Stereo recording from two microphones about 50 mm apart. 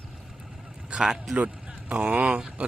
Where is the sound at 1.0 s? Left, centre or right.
Centre.